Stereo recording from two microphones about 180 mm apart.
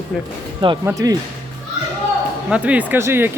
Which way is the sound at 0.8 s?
20° right (ahead or behind).